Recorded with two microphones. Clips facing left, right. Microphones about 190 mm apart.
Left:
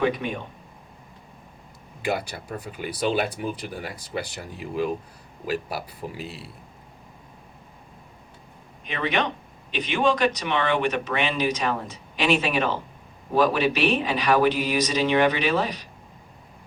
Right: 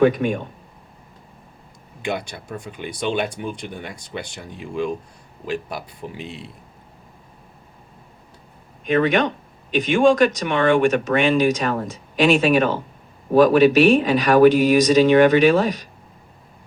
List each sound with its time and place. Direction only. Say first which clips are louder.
0.0 s speech: right 8 dB; 50° right (ahead or behind)
2.0 s speech: right 1 dB; 5° left (ahead or behind)
8.8 s speech: right 8 dB; 50° right (ahead or behind)